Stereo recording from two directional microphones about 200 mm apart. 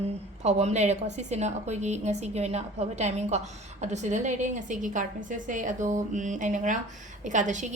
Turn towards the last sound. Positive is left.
turn(degrees=-40)  # may be behind; listen again after turning